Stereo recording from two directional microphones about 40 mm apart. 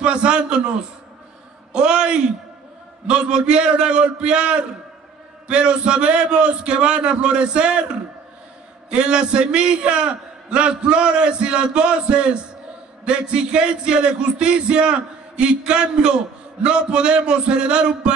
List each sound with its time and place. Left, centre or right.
0.0 s a man's voice: right
1.7 s a sound: right
3.1 s a man's voice: right
8.9 s a man's voice: right